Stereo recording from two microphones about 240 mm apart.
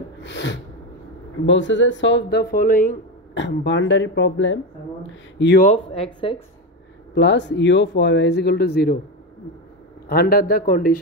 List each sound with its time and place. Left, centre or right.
0.2 s sneeze: left
1.4 s speech: left
3.3 s speech: left
7.2 s speech: left
10.0 s speech: left